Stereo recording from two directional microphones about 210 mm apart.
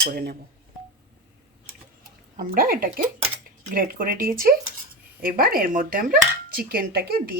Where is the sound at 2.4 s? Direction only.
40° right (ahead or behind).